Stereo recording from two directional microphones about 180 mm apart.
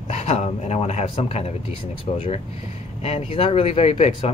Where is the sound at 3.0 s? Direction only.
35° left (ahead or behind).